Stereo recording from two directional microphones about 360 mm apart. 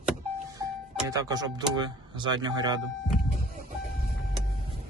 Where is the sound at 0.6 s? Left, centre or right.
Centre.